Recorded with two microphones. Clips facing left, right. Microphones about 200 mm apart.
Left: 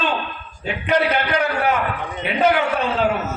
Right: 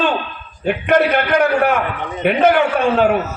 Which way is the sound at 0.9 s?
55° right (ahead or behind).